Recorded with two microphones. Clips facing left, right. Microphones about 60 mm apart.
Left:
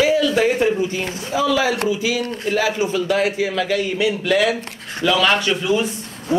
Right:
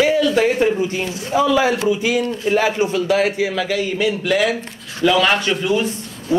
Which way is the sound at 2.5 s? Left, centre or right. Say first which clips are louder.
Right 3 dB; centre.